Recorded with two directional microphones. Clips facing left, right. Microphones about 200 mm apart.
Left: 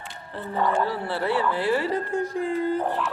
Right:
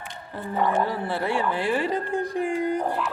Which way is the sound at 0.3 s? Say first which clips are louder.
Even; 10° right (ahead or behind).